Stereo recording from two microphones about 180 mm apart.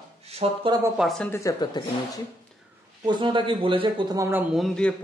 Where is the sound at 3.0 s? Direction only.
25° right (ahead or behind).